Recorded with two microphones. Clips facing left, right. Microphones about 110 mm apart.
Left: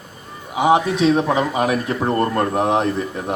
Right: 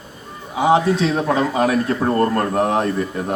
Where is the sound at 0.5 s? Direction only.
15° left (ahead or behind).